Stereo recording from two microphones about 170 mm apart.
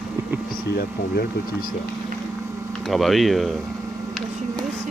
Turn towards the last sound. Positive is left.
turn(degrees=0)  # may be behind; listen again after turning